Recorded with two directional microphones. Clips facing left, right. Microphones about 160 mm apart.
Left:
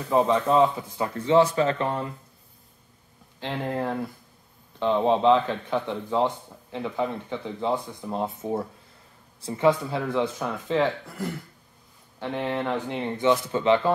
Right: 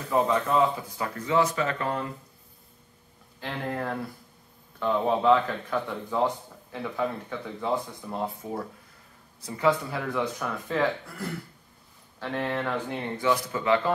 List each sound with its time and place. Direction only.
0.1 s speech: 20° left (ahead or behind)
3.3 s speech: 25° left (ahead or behind)